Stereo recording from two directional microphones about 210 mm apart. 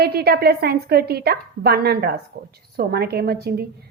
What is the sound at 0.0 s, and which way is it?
A woman's voice, 50° right (ahead or behind).